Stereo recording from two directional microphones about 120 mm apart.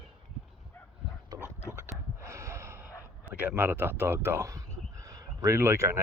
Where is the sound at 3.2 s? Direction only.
15° right (ahead or behind).